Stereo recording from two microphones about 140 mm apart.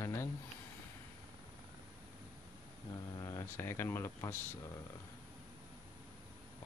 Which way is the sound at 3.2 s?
20° left (ahead or behind).